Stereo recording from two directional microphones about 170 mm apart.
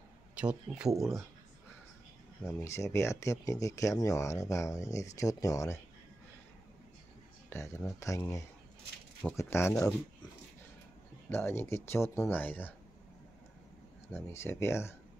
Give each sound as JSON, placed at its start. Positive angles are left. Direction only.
{"t": 0.4, "sound": "speech", "side_deg": -5}
{"t": 2.6, "sound": "speech", "side_deg": 15}
{"t": 7.4, "sound": "speech", "side_deg": 15}
{"t": 11.2, "sound": "speech", "side_deg": 15}
{"t": 14.0, "sound": "speech", "side_deg": 15}